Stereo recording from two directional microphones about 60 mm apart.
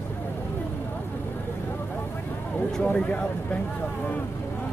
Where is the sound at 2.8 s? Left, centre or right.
Centre.